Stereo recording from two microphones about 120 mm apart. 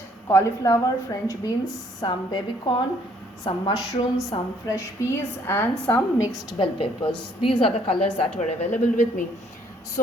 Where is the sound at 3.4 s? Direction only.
35° left (ahead or behind).